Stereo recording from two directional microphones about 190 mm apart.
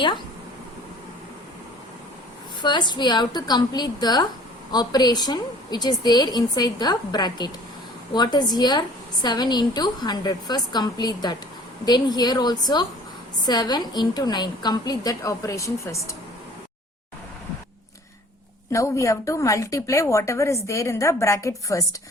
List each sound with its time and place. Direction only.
2.6 s a woman's voice: 25° left (ahead or behind)
18.7 s a woman's voice: 15° left (ahead or behind)